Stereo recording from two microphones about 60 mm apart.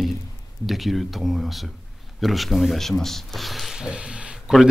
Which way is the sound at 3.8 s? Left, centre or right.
Centre.